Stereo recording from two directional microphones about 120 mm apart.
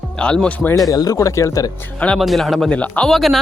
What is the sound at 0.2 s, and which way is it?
Speech, 10° left (ahead or behind).